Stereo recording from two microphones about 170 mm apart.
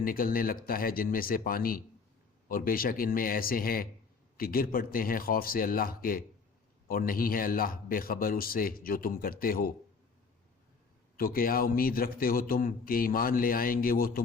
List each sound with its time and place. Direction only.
0.0 s a man's voice: 55° left (ahead or behind)
11.2 s a man's voice: 60° left (ahead or behind)